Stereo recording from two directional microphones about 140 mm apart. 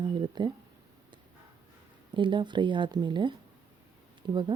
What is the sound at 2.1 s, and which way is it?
Speech, 35° right (ahead or behind).